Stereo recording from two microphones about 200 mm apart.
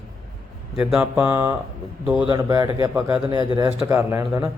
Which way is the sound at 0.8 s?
5° right (ahead or behind).